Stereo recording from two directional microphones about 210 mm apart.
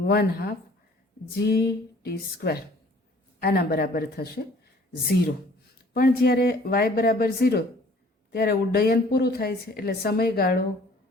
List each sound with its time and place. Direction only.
0.0 s speech: 50° left (ahead or behind)
5.9 s speech: 45° left (ahead or behind)